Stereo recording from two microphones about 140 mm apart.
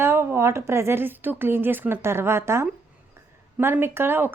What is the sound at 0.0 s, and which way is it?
Speech, 15° right (ahead or behind).